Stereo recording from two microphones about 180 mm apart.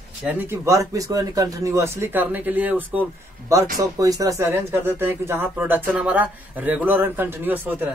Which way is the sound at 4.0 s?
20° right (ahead or behind).